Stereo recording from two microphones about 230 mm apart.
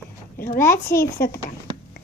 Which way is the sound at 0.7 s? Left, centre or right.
Centre.